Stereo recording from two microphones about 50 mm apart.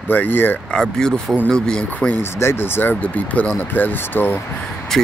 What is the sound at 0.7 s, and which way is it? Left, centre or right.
Speech, centre.